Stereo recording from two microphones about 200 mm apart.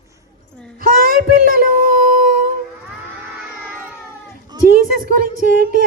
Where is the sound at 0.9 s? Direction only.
45° right (ahead or behind).